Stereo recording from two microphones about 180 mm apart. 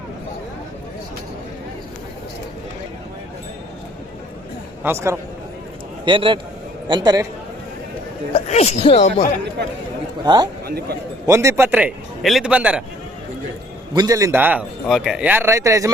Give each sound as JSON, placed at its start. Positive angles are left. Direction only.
{"t": 4.8, "sound": "speech", "side_deg": -15}
{"t": 6.1, "sound": "a man's voice", "side_deg": -30}
{"t": 8.3, "sound": "speech", "side_deg": 35}
{"t": 10.2, "sound": "a man's voice", "side_deg": -25}
{"t": 10.7, "sound": "a man's voice", "side_deg": -60}
{"t": 11.3, "sound": "speech", "side_deg": -15}
{"t": 13.9, "sound": "speech", "side_deg": -20}